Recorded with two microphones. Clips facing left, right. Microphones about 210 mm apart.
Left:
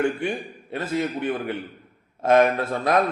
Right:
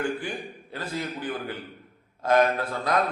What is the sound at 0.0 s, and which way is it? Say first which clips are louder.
A man's voice: left 5 dB; 25° left (ahead or behind).